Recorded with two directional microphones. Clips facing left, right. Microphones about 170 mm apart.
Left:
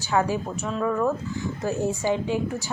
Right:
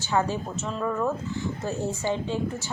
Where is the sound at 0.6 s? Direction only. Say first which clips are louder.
Left 3 dB; centre (ahead or behind).